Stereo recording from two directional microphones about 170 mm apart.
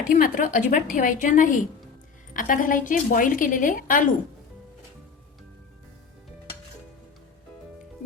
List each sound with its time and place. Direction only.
0.1 s a woman's voice: 50° left (ahead or behind)